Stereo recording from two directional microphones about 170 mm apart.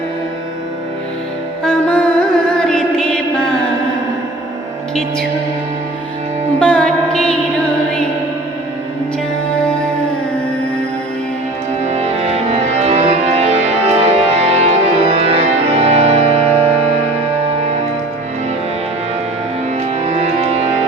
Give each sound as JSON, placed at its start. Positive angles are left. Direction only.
{"t": 1.6, "sound": "music", "side_deg": 5}
{"t": 6.6, "sound": "music", "side_deg": 5}
{"t": 11.9, "sound": "music", "side_deg": -40}
{"t": 20.1, "sound": "music", "side_deg": -40}